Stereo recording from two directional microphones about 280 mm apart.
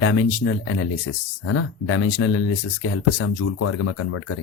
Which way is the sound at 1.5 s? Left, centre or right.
Left.